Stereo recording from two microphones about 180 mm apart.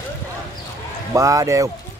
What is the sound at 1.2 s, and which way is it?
Speech, 20° right (ahead or behind).